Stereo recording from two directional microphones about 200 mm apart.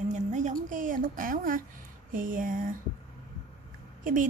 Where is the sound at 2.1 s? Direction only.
40° right (ahead or behind).